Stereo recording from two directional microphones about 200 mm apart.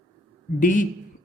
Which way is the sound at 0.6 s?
40° left (ahead or behind).